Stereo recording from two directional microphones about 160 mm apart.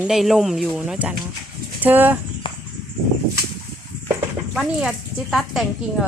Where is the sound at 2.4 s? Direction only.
30° left (ahead or behind).